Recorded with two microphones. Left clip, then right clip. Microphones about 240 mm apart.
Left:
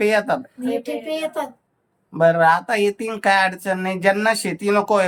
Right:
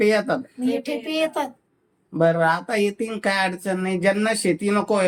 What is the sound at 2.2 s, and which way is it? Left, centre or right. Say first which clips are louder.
Speech: left 4 dB; left.